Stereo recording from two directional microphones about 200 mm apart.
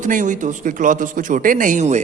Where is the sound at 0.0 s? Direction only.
40° right (ahead or behind).